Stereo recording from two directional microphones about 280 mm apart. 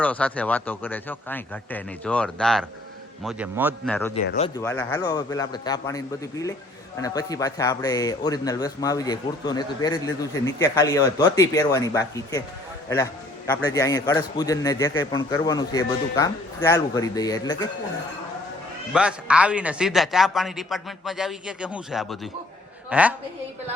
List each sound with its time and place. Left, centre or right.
0.0 s a man's voice: centre
3.8 s a man's voice: centre
4.4 s a man's voice: centre
4.6 s a man's voice: centre
7.0 s a man's voice: centre
13.5 s a man's voice: centre
18.9 s a man's voice: centre